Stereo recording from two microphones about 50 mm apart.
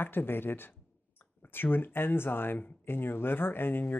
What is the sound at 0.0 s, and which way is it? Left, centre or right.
Speech, left.